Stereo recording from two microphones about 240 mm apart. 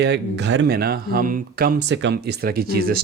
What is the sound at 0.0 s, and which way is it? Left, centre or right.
Speech, right.